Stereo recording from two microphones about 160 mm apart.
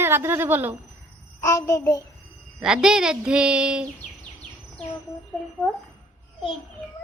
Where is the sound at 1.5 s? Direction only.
20° left (ahead or behind).